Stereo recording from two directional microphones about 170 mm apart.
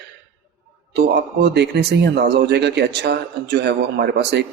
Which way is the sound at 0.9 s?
75° right (ahead or behind).